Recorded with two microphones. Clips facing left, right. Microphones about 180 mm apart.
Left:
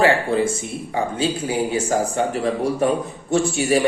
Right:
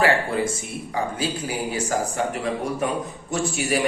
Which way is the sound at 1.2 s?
25° left (ahead or behind).